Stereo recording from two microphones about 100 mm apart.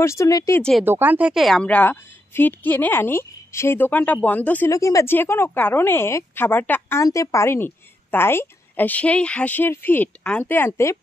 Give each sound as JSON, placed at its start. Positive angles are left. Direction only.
{"t": 0.0, "sound": "a woman's voice", "side_deg": 30}
{"t": 0.8, "sound": "speech", "side_deg": -20}
{"t": 1.3, "sound": "speech", "side_deg": 0}
{"t": 1.6, "sound": "a woman's voice", "side_deg": 15}
{"t": 4.6, "sound": "a woman's voice", "side_deg": 35}
{"t": 7.0, "sound": "a woman's voice", "side_deg": 35}